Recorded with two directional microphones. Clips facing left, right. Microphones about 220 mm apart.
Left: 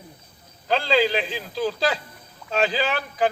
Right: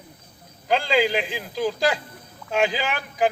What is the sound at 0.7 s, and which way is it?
Speech, 15° right (ahead or behind).